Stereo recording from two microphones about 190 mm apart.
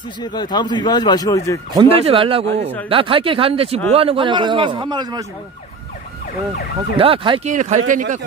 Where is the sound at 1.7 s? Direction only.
25° right (ahead or behind).